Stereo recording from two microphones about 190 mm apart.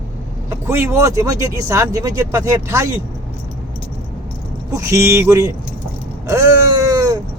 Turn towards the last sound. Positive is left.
turn(degrees=-20)  # may be behind; listen again after turning